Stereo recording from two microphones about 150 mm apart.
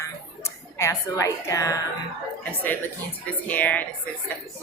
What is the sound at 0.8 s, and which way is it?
Speech, 20° left (ahead or behind).